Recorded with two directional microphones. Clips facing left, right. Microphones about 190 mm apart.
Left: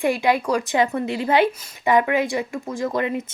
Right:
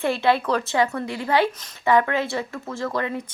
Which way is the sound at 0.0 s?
15° left (ahead or behind).